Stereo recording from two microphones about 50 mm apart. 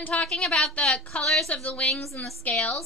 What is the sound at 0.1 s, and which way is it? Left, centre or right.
Speech, centre.